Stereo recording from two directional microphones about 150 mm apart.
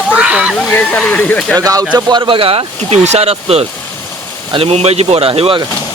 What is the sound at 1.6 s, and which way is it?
Speech, 25° right (ahead or behind).